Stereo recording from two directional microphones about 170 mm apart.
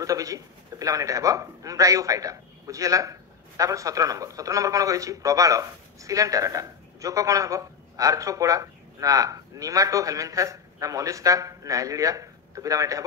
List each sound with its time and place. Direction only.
0.0 s a man's voice: 20° right (ahead or behind)